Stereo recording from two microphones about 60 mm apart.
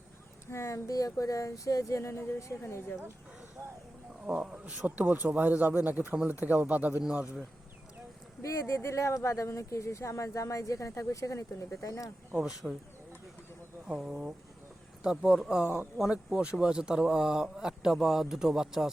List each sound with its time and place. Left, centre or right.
0.5 s speech: left
2.2 s a woman's voice: left
3.6 s a sound: right
4.3 s speech: centre
8.4 s speech: left
12.4 s speech: centre
13.8 s speech: centre